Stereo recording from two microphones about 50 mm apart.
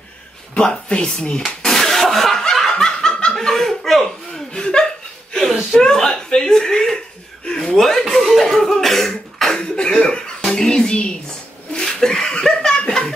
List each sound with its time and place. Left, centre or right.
0.6 s speech: centre
1.4 s snicker: centre
3.3 s chuckle: centre
4.5 s speech: centre
5.3 s whimper: centre
5.8 s speech: centre
7.4 s cough: centre
9.6 s a sound: centre
11.7 s laughter: centre